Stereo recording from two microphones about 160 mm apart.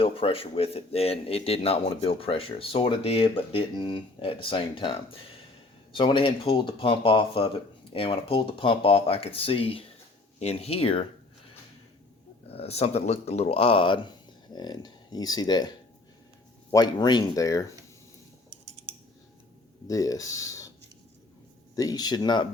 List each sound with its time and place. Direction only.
0.0 s speech: 35° left (ahead or behind)
12.5 s speech: 40° left (ahead or behind)
16.7 s speech: 25° left (ahead or behind)
19.9 s speech: 20° left (ahead or behind)
21.8 s speech: 25° left (ahead or behind)